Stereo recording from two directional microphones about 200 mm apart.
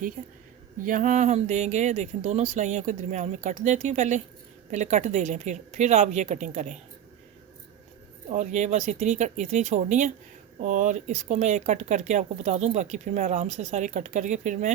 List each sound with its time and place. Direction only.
0.2 s speech: 40° right (ahead or behind)
8.3 s speech: 35° right (ahead or behind)